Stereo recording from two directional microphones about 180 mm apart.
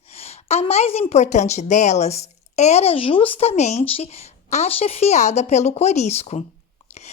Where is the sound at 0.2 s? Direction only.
35° left (ahead or behind).